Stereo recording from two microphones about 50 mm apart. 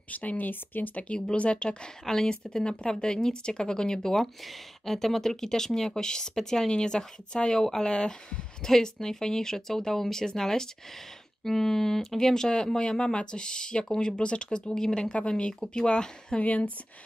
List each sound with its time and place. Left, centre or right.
0.1 s speech: left
1.3 s speech: left
16.3 s speech: left